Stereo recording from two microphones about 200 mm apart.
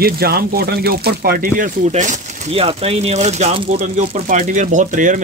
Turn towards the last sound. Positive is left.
turn(degrees=-40)  # may be behind; listen again after turning